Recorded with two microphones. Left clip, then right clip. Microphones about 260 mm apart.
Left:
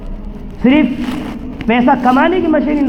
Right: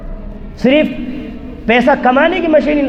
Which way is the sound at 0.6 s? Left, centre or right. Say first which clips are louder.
Right 1 dB; right.